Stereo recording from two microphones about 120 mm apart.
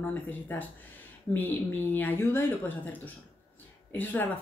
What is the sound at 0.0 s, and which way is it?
Speech, 15° left (ahead or behind).